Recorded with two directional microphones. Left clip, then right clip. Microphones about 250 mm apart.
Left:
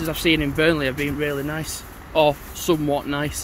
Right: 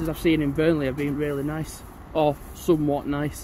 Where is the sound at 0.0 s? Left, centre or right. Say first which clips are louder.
Left 3 dB; centre.